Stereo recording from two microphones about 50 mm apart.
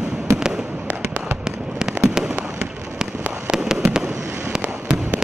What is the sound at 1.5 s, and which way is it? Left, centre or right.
Fireworks, centre.